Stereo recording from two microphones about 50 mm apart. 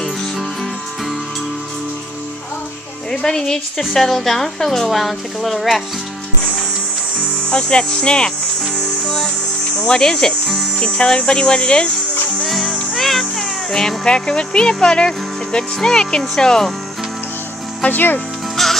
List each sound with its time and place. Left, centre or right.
3.1 s speech: centre
7.4 s speech: centre
9.8 s speech: centre
12.4 s music: centre
12.9 s speech: centre
17.9 s speech: left
18.6 s music: centre